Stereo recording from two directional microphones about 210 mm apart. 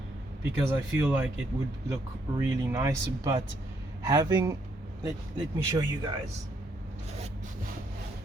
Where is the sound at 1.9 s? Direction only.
15° right (ahead or behind).